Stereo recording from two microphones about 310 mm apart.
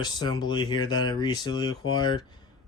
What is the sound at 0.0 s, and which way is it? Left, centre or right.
Speech, centre.